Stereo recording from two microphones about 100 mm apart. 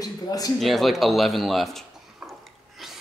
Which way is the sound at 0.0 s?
40° left (ahead or behind).